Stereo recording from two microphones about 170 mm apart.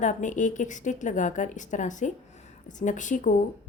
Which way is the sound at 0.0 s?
45° left (ahead or behind).